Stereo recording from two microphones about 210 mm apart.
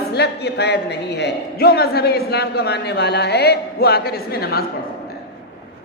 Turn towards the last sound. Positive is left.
turn(degrees=45)  # may be behind; listen again after turning